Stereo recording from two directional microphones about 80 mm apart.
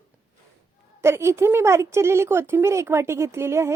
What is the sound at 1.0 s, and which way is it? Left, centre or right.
A woman's voice, right.